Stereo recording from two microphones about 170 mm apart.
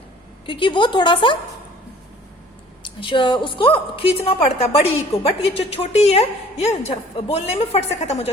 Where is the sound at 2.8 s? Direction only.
30° left (ahead or behind).